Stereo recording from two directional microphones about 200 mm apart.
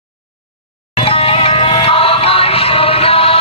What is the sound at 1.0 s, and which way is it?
Music, 30° left (ahead or behind).